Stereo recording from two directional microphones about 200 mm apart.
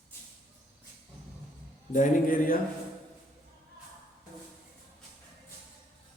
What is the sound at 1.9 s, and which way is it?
Speech, 40° left (ahead or behind).